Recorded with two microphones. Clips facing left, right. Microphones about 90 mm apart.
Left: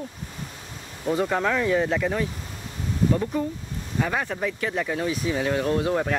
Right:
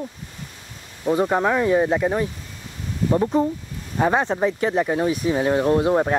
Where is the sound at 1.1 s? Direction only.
20° right (ahead or behind).